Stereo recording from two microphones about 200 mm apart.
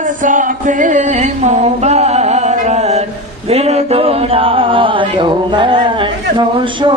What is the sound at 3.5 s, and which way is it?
Music, 30° right (ahead or behind).